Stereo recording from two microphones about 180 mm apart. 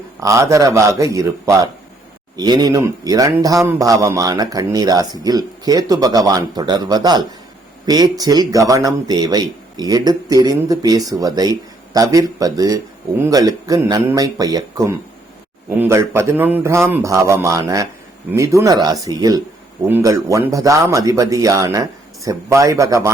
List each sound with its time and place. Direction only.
0.2 s speech: 15° right (ahead or behind)